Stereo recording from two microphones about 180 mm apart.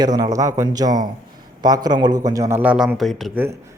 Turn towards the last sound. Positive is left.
turn(degrees=0)  # may be behind; listen again after turning